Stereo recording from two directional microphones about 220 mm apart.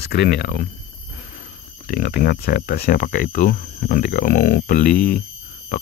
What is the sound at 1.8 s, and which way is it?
Speech, 45° left (ahead or behind).